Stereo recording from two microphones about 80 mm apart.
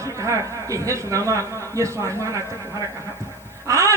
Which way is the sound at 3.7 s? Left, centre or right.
Right.